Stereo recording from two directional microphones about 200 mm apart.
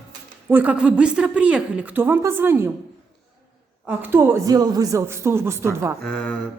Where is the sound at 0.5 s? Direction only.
5° right (ahead or behind).